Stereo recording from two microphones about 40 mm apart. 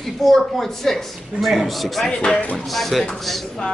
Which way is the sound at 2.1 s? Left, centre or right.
Left.